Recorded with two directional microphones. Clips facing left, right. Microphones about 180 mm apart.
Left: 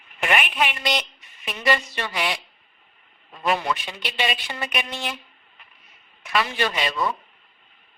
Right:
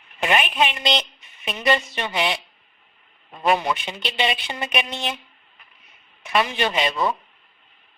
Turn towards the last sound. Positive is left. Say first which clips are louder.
# right 2 dB
turn(degrees=-25)  # may be behind; listen again after turning